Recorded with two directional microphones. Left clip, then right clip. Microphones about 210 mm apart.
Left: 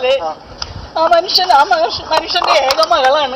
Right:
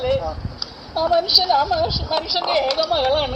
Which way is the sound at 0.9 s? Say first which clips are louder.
Left 5 dB; 40° left (ahead or behind).